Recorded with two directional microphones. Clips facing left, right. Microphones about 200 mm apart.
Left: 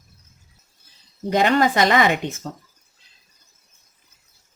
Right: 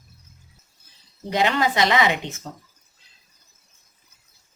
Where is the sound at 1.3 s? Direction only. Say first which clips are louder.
Left 4 dB; 50° left (ahead or behind).